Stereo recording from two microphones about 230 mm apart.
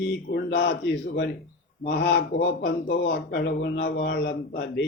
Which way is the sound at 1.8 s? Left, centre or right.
Left.